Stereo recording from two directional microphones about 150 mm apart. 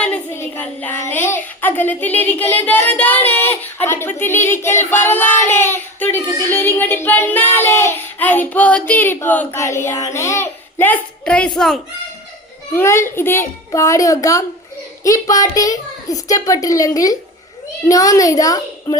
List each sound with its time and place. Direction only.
0.0 s child singing: 15° left (ahead or behind)
12.7 s child singing: 15° left (ahead or behind)
13.7 s a child's voice: 20° left (ahead or behind)